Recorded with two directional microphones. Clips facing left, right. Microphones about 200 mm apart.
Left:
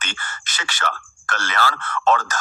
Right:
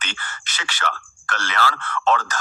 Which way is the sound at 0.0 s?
45° left (ahead or behind).